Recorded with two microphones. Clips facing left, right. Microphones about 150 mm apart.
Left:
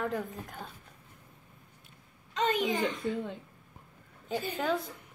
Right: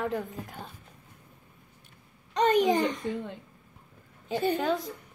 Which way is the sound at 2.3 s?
40° right (ahead or behind).